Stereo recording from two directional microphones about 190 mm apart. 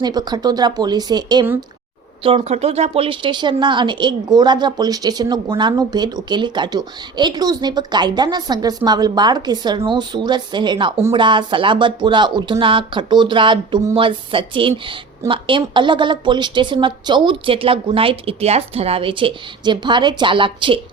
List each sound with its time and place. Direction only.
0.0 s a woman's voice: 20° right (ahead or behind)